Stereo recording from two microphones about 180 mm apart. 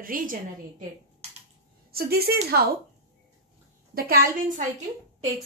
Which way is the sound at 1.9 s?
60° right (ahead or behind).